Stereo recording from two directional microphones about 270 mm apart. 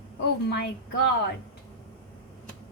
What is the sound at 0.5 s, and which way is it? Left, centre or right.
Speech, left.